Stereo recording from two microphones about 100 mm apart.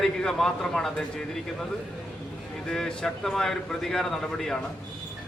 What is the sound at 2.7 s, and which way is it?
A man's voice, 5° left (ahead or behind).